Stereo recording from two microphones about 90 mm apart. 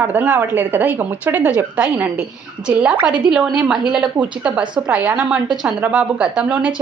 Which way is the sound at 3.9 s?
10° right (ahead or behind).